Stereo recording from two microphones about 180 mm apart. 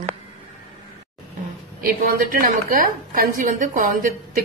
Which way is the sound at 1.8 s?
55° right (ahead or behind).